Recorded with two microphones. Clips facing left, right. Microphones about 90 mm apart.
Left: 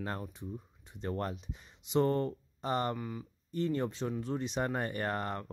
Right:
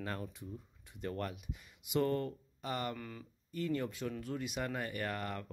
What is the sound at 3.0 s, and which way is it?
Speech, 15° left (ahead or behind).